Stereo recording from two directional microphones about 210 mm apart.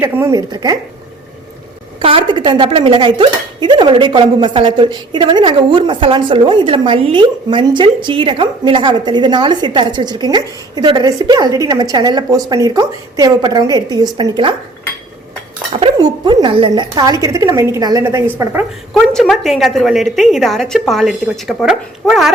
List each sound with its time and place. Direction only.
0.0 s a woman's voice: 15° right (ahead or behind)
2.0 s speech: 25° right (ahead or behind)
15.8 s a woman's voice: 20° right (ahead or behind)
18.9 s a woman's voice: centre (ahead or behind)